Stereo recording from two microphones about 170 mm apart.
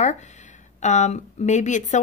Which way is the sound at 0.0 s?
45° left (ahead or behind).